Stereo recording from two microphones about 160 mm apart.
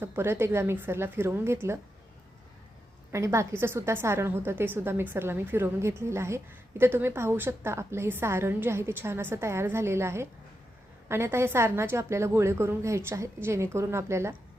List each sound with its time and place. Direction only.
0.0 s a woman's voice: 15° right (ahead or behind)
3.1 s a woman's voice: 20° right (ahead or behind)